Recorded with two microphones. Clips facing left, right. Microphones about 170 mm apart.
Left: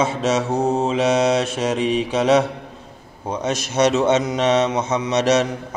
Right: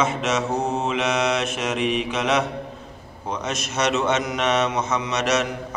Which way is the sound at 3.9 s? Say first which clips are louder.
Left 5 dB; 30° left (ahead or behind).